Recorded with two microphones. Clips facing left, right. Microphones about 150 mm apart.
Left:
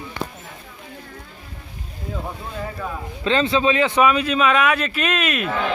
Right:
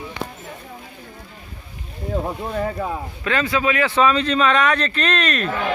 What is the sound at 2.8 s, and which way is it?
Speech, 30° right (ahead or behind).